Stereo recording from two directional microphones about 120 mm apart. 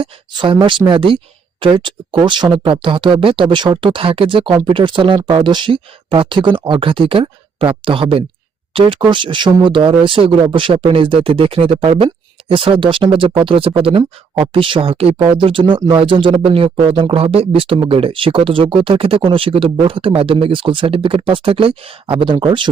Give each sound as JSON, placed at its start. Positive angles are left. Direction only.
{"t": 0.0, "sound": "speech", "side_deg": -45}